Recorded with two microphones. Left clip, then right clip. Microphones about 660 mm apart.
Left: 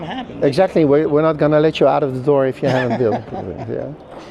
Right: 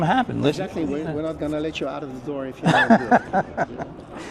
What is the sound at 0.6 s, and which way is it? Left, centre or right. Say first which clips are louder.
Speech: left 14 dB; left.